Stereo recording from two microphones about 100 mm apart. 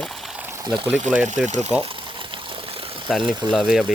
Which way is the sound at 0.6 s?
50° right (ahead or behind).